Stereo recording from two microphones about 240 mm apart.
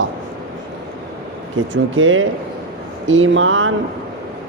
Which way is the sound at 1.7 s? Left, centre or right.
Right.